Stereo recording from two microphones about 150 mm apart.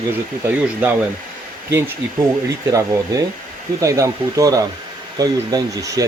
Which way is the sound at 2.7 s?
20° right (ahead or behind).